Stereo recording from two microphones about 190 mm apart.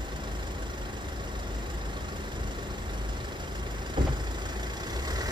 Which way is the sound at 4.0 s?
25° right (ahead or behind).